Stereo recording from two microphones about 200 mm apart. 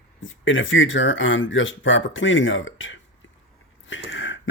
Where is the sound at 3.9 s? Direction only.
70° left (ahead or behind).